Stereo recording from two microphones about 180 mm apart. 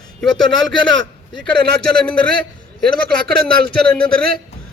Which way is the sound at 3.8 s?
5° left (ahead or behind).